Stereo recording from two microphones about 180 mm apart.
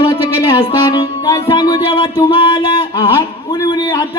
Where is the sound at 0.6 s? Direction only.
25° left (ahead or behind).